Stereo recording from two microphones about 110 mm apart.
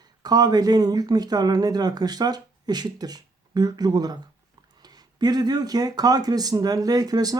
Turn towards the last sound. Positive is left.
turn(degrees=-35)  # may be behind; listen again after turning